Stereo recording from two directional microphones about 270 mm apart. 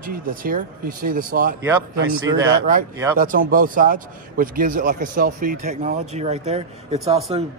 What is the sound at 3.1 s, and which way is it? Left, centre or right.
A man's voice, right.